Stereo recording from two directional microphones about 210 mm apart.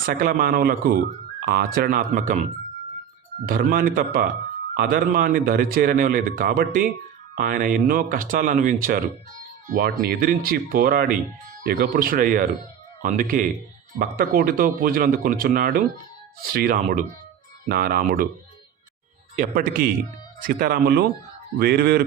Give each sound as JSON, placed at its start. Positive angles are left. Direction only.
{"t": 0.0, "sound": "speech", "side_deg": -45}
{"t": 3.4, "sound": "speech", "side_deg": -45}
{"t": 19.4, "sound": "speech", "side_deg": -40}